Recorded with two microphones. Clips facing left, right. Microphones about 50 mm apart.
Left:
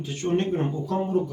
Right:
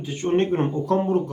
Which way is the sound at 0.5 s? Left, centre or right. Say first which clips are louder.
Right 4 dB; right.